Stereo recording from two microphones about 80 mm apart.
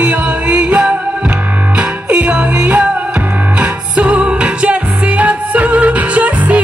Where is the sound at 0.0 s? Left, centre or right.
Centre.